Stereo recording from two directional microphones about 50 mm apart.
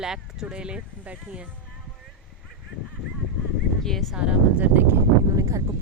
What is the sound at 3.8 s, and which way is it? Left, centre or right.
Speech, centre.